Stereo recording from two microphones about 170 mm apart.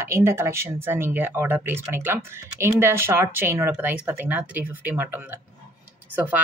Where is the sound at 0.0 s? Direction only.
15° right (ahead or behind).